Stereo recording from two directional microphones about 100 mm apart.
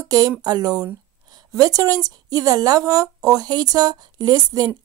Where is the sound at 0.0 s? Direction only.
35° right (ahead or behind).